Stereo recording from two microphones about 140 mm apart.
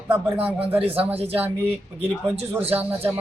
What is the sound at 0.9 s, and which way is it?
Speech, 45° right (ahead or behind).